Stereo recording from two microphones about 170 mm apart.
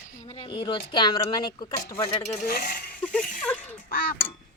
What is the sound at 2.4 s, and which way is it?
Speech, 60° left (ahead or behind).